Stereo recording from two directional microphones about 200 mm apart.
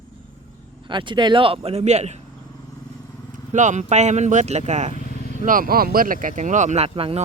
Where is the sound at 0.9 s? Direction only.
25° right (ahead or behind).